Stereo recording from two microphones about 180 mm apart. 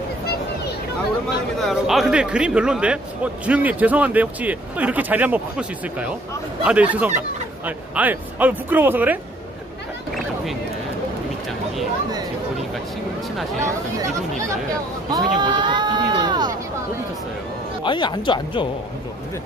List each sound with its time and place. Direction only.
1.6 s speech: centre (ahead or behind)
15.0 s speech: 25° right (ahead or behind)
17.8 s speech: 25° left (ahead or behind)